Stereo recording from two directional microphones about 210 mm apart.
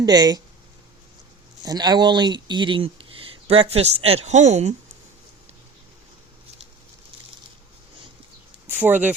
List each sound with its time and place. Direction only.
0.0 s speech: 20° right (ahead or behind)
1.6 s speech: 20° right (ahead or behind)
8.6 s speech: 10° right (ahead or behind)